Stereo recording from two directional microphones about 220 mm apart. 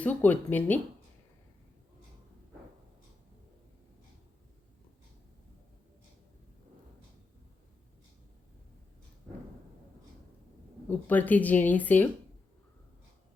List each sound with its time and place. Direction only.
0.0 s speech: 5° left (ahead or behind)
10.8 s speech: 10° left (ahead or behind)